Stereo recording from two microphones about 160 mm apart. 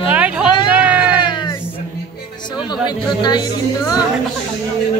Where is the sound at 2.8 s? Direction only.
25° left (ahead or behind).